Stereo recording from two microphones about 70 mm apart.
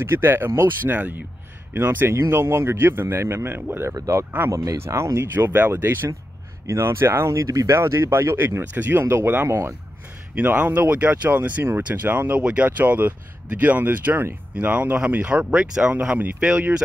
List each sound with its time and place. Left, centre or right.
0.0 s a man's voice: right
4.5 s a man's voice: right
7.7 s a man's voice: right
10.3 s speech: right